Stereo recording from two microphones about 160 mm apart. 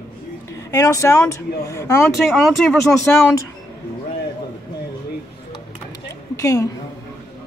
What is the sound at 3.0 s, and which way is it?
Speech, 15° left (ahead or behind).